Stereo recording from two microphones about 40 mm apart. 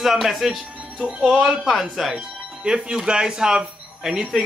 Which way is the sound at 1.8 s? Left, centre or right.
Centre.